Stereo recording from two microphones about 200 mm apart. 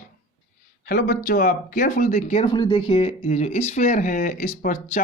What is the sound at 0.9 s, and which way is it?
Speech, 50° left (ahead or behind).